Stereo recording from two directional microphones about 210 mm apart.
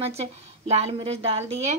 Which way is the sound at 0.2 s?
30° right (ahead or behind).